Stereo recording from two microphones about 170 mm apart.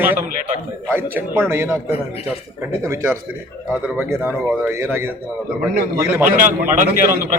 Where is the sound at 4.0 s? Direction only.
10° right (ahead or behind).